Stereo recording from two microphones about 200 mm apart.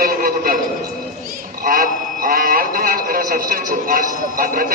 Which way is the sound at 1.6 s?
45° right (ahead or behind).